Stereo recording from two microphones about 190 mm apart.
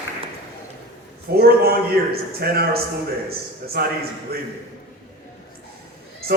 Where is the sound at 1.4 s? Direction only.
55° right (ahead or behind).